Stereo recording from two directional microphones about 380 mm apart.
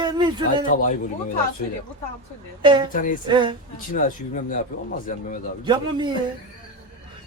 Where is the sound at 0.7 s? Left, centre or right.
Left.